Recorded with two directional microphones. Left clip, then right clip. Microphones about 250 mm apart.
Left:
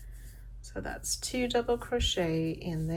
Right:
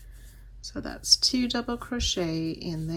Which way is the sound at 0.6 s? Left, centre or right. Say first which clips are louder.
Right 2 dB; right.